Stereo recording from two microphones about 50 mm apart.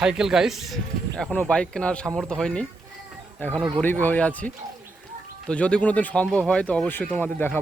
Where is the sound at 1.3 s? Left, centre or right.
Left.